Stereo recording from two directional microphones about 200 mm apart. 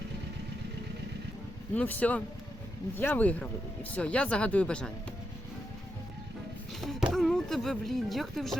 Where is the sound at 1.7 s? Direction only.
10° left (ahead or behind).